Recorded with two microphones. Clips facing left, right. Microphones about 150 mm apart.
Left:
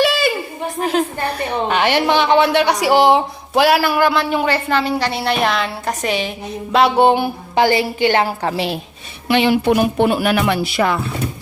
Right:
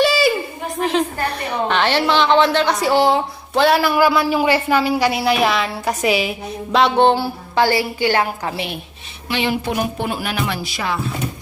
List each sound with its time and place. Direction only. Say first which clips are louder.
0.0 s a sound: right 1 dB; centre (ahead or behind)
1.7 s a woman's voice: left 1 dB; 15° left (ahead or behind)
3.7 s a woman's voice: right 2 dB; centre (ahead or behind)
7.1 s speech: left 2 dB; 20° left (ahead or behind)
8.4 s a woman's voice: left 5 dB; 35° left (ahead or behind)
9.3 s music: left 7 dB; 65° left (ahead or behind)